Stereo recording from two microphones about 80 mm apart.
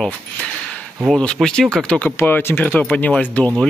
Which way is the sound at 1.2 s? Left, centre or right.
Centre.